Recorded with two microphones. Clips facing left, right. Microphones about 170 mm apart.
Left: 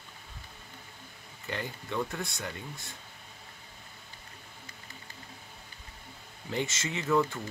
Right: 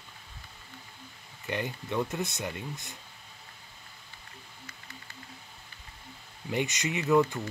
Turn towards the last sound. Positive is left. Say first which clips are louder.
# right 3 dB
turn(degrees=-15)  # may be behind; listen again after turning